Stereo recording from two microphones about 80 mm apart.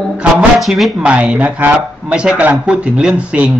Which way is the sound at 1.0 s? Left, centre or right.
Centre.